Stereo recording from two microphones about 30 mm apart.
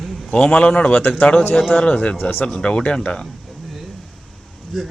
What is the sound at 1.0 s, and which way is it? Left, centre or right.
Speech, left.